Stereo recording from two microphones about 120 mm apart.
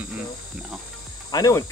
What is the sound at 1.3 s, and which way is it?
Speech, 30° left (ahead or behind).